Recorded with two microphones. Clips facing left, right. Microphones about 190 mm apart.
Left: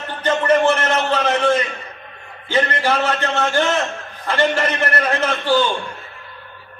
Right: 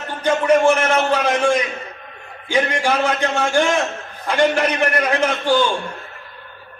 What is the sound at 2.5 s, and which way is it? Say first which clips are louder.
A man's voice: even; 10° right (ahead or behind).